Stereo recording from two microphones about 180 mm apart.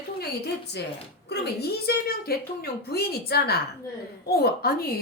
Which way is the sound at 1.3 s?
65° left (ahead or behind).